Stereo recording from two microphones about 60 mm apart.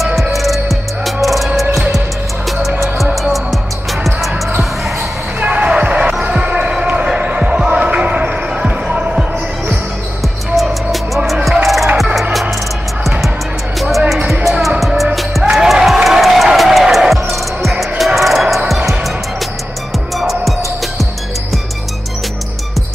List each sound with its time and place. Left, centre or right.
0.0 s music: centre
5.4 s basketball bounce: right
10.5 s music: centre
13.7 s music: centre
20.2 s music: centre